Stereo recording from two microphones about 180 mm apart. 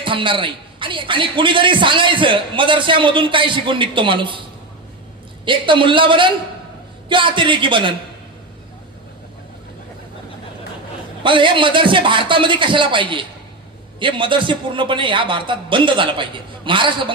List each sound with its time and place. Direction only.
0.0 s a man's voice: 30° right (ahead or behind)
5.5 s a man's voice: 25° right (ahead or behind)
11.2 s a man's voice: 25° right (ahead or behind)